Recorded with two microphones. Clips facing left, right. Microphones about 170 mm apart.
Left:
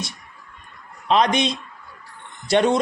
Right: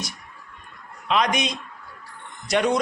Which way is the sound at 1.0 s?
35° left (ahead or behind).